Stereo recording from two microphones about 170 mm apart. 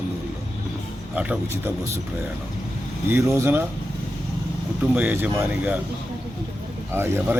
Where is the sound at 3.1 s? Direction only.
15° right (ahead or behind).